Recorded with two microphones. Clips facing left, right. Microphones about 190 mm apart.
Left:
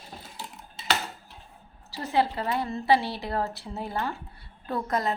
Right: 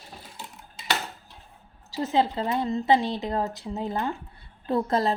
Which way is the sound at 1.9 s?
20° right (ahead or behind).